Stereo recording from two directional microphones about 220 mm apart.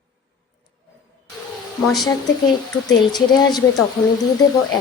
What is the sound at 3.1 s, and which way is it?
Speech, 20° left (ahead or behind).